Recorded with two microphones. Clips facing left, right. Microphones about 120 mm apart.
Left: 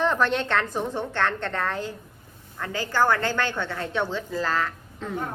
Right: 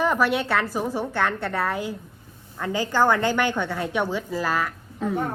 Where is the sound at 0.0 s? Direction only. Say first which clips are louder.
Right 1 dB; 10° right (ahead or behind).